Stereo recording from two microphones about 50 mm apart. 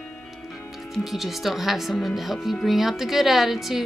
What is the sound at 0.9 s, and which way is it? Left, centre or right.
Speech, centre.